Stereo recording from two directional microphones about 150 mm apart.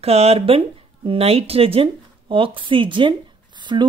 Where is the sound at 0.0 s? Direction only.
45° right (ahead or behind).